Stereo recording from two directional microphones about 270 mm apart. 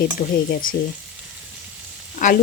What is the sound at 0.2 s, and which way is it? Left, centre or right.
Frying, left.